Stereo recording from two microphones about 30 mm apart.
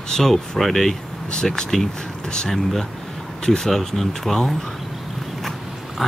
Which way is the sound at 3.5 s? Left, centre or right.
Centre.